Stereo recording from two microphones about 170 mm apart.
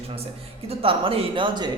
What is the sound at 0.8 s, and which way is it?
Speech, 35° right (ahead or behind).